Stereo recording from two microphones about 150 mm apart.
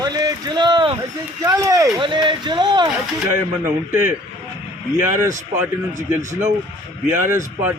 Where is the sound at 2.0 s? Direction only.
35° right (ahead or behind).